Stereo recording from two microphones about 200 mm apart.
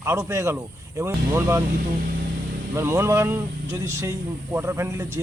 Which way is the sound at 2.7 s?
15° right (ahead or behind).